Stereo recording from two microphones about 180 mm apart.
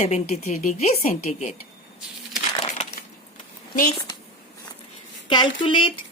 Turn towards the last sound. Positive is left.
turn(degrees=30)  # may be behind; listen again after turning